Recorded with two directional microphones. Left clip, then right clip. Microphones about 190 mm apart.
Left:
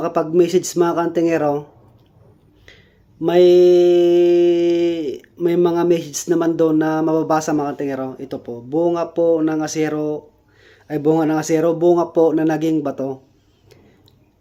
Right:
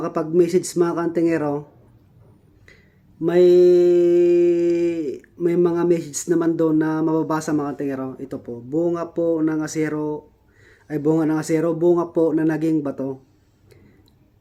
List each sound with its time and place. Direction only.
0.0 s mantra: 15° right (ahead or behind)
3.2 s mantra: 15° right (ahead or behind)
8.7 s speech: 20° right (ahead or behind)
10.6 s mantra: 15° right (ahead or behind)